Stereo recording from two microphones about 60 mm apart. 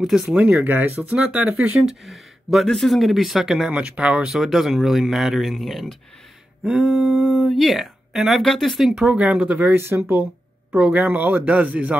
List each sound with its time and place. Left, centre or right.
0.0 s speech: centre
0.6 s speech: right
1.1 s speech: centre
1.9 s speech: centre
3.7 s speech: centre
4.3 s speech: centre
6.6 s speech: centre
9.5 s speech: right
9.8 s speech: right
10.7 s speech: right
11.0 s speech: right